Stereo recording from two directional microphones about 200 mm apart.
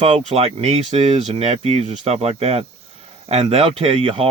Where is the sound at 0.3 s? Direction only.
30° right (ahead or behind).